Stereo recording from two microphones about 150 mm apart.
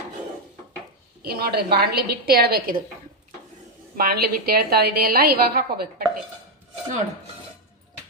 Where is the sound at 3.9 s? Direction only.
90° right.